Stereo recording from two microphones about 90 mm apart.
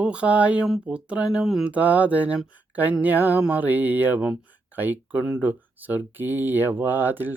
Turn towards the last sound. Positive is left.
turn(degrees=-20)  # may be behind; listen again after turning